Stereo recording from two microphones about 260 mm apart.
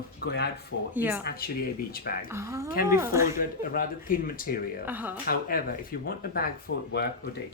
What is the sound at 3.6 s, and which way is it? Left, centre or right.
Speech, left.